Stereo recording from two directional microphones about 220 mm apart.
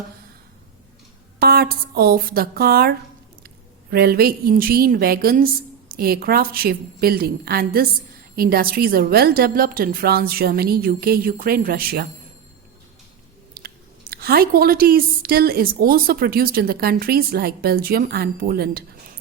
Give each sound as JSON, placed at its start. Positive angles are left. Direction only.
{"t": 1.4, "sound": "speech", "side_deg": -45}
{"t": 3.9, "sound": "speech", "side_deg": -45}
{"t": 13.5, "sound": "speech", "side_deg": -45}